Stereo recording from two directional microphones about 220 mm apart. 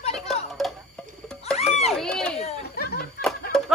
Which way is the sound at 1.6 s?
30° left (ahead or behind).